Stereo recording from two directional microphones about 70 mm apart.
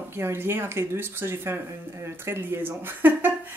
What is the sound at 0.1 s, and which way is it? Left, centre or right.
Speech, right.